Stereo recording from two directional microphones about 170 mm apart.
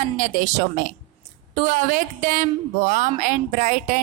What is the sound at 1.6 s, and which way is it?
A woman's voice, 50° right (ahead or behind).